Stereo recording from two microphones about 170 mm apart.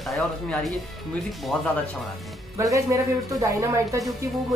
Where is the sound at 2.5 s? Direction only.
20° right (ahead or behind).